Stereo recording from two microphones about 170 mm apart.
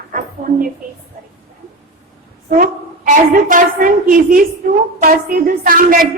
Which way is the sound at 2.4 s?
50° right (ahead or behind).